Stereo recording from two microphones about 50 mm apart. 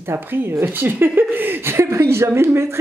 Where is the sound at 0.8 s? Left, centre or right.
Right.